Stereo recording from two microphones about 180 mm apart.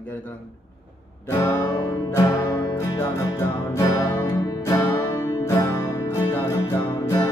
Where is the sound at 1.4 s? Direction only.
15° left (ahead or behind).